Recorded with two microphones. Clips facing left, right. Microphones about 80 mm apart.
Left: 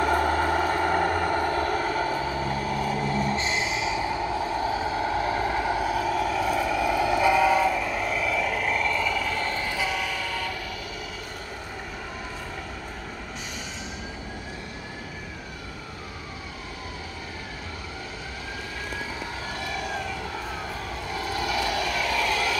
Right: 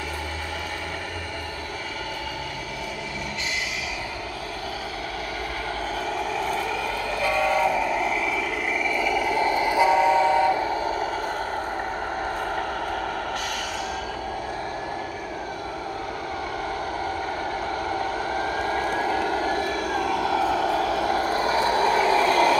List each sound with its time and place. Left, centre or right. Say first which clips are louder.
0.0 s vehicle: left 10 dB; left
4.6 s vehicle: left 6 dB; left
5.7 s vehicle: left 3 dB; centre; by 10.7 s right
18.7 s vehicle: right 10 dB; right
21.1 s vehicle: right 6 dB; right